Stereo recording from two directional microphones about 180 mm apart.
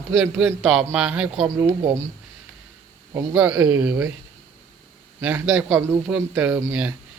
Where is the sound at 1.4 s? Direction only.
15° right (ahead or behind).